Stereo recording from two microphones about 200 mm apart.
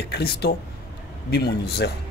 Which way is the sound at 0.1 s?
55° left (ahead or behind).